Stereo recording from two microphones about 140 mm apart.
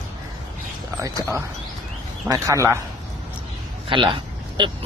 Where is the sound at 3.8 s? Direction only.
35° right (ahead or behind).